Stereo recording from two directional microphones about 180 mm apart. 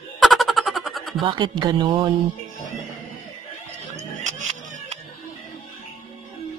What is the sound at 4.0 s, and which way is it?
Music, 40° right (ahead or behind).